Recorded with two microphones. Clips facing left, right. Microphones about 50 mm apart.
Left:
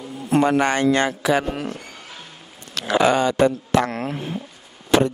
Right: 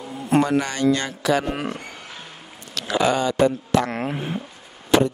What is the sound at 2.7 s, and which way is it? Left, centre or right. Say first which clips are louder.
Speech: left 3 dB; left.